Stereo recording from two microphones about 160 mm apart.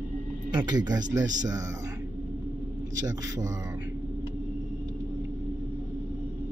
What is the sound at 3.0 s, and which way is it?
Speech, 20° right (ahead or behind).